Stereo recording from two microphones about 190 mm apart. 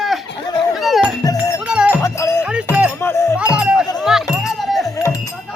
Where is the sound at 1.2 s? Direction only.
20° left (ahead or behind).